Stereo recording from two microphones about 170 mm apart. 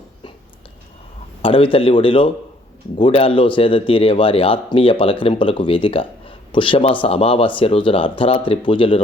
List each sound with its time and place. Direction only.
1.4 s a man's voice: 30° left (ahead or behind)